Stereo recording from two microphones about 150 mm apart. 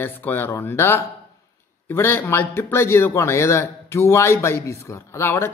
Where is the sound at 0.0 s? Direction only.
15° left (ahead or behind).